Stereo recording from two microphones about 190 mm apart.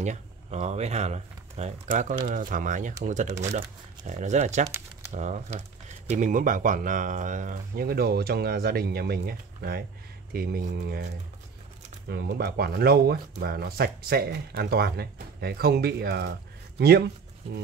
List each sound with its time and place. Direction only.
0.0 s speech: 35° right (ahead or behind); by 11.1 s 60° right (ahead or behind)
12.1 s speech: 60° right (ahead or behind)